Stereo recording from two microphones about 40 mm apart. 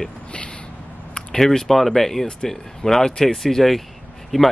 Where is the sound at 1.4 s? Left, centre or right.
Centre.